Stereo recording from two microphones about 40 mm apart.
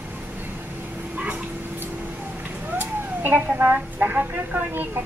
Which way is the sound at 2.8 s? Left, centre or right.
Right.